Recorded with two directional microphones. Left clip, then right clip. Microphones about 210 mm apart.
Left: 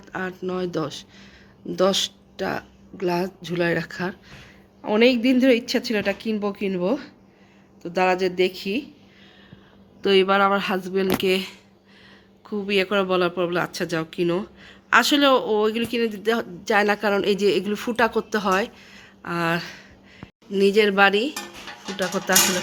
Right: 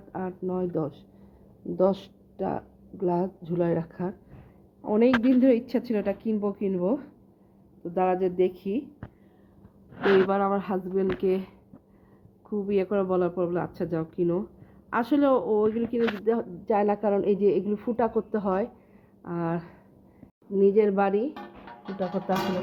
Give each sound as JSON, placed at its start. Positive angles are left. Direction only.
{"t": 0.1, "sound": "speech", "side_deg": -5}
{"t": 10.2, "sound": "speech", "side_deg": 0}
{"t": 12.6, "sound": "speech", "side_deg": 0}
{"t": 22.2, "sound": "speech", "side_deg": 25}